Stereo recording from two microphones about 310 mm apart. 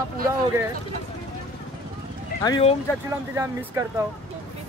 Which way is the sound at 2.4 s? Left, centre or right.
Centre.